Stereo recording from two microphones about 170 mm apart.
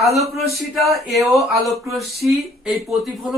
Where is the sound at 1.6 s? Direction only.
Centre (ahead or behind).